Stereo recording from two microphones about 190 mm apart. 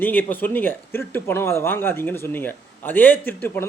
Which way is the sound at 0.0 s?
10° left (ahead or behind).